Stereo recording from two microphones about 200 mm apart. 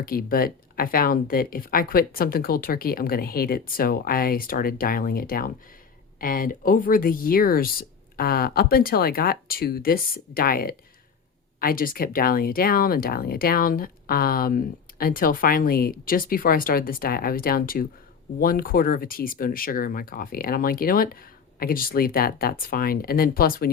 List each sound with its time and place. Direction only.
0.0 s speech: 45° left (ahead or behind)